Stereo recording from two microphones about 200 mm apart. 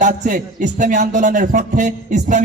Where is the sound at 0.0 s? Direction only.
40° right (ahead or behind).